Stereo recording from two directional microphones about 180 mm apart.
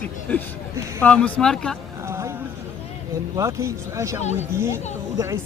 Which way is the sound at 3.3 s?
15° right (ahead or behind).